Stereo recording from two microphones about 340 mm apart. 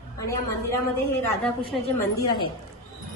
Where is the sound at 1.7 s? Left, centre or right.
Centre.